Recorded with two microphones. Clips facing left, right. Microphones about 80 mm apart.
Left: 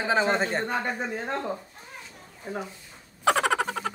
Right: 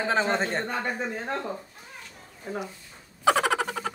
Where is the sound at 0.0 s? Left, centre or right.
Centre.